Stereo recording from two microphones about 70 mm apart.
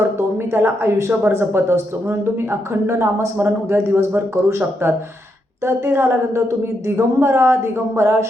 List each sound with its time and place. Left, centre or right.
0.0 s speech: right